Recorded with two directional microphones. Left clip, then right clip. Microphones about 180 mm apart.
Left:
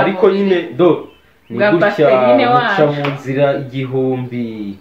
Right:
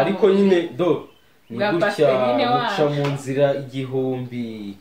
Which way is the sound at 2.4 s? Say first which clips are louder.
Left 7 dB; 15° left (ahead or behind).